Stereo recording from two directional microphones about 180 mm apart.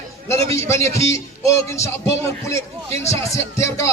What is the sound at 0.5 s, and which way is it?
A man's voice, 15° left (ahead or behind).